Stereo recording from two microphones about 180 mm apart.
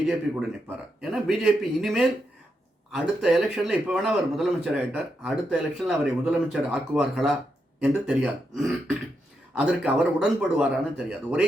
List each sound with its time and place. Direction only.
0.0 s a man's voice: 5° right (ahead or behind)